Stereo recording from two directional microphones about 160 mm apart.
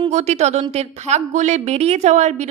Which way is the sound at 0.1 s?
45° right (ahead or behind).